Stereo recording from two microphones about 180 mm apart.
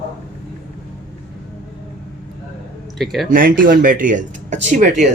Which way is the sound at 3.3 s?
50° right (ahead or behind).